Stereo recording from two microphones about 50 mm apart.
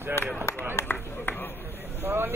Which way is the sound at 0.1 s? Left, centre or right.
Left.